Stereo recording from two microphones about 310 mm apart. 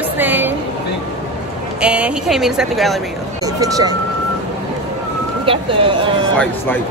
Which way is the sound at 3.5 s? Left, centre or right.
Centre.